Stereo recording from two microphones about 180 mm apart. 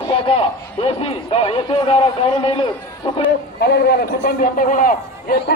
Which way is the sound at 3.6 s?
65° left (ahead or behind).